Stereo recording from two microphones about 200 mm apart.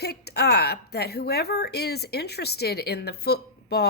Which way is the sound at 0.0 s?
55° left (ahead or behind).